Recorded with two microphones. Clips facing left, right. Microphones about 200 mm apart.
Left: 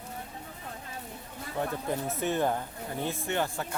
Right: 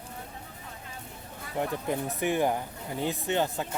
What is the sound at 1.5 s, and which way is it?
Speech, 15° right (ahead or behind).